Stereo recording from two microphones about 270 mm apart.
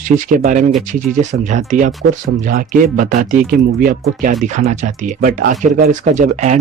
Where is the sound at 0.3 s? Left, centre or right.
Right.